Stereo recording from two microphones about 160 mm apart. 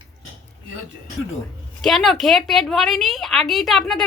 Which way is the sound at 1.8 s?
Centre (ahead or behind).